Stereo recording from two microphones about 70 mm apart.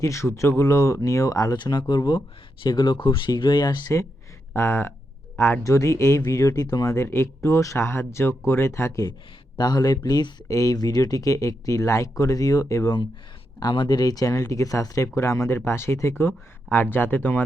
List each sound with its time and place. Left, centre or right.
0.0 s speech: left
1.5 s speech: left
4.5 s speech: left
5.6 s speech: left
6.9 s speech: left
9.6 s speech: left
10.5 s speech: left
10.8 s speech: left
13.6 s speech: left
14.3 s speech: left